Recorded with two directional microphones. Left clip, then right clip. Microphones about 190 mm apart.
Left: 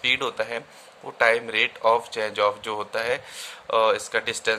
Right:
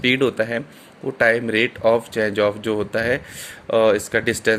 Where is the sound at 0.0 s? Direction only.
15° right (ahead or behind).